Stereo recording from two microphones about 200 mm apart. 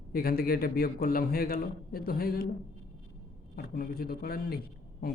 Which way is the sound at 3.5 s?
45° left (ahead or behind).